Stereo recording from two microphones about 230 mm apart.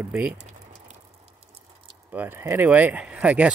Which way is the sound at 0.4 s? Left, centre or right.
Right.